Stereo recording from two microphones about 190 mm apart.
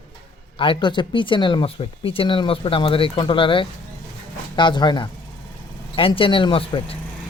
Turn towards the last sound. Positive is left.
turn(degrees=30)  # may be behind; listen again after turning